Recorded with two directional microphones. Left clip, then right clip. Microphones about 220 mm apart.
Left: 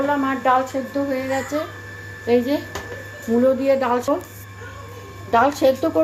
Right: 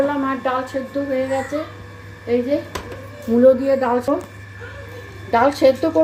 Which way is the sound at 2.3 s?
45° left (ahead or behind).